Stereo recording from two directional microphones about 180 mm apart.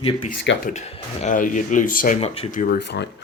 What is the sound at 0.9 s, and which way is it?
Speech, 45° left (ahead or behind).